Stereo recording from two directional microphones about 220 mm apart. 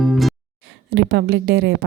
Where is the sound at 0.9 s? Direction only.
50° right (ahead or behind).